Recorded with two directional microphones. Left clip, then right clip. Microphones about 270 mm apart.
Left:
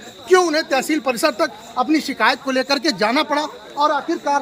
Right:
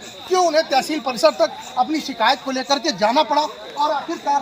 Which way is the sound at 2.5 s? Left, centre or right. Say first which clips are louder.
Left 2 dB; centre.